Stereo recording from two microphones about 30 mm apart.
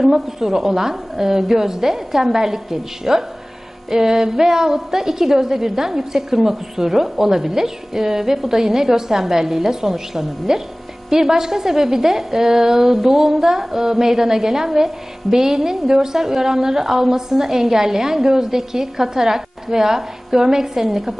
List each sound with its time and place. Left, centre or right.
0.1 s a woman's voice: centre